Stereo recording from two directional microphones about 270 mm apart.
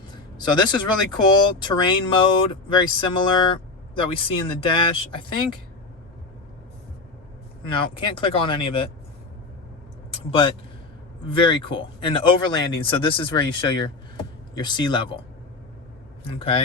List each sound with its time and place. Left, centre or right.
0.1 s speech: centre
7.7 s speech: centre
11.3 s speech: centre
16.4 s speech: centre